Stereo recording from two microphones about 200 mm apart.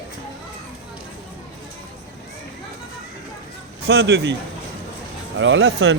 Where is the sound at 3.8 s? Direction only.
55° right (ahead or behind).